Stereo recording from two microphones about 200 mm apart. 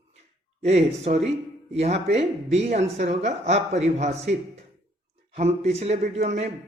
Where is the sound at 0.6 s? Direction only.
30° right (ahead or behind).